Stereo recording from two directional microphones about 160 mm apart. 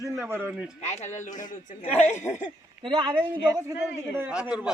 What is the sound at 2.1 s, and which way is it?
Speech, 15° left (ahead or behind).